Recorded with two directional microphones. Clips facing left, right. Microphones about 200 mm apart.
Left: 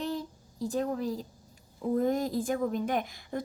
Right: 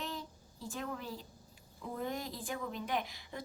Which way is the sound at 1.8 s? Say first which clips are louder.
Left 12 dB; 45° left (ahead or behind).